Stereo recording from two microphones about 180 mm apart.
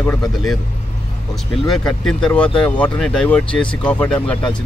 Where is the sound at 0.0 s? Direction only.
15° left (ahead or behind).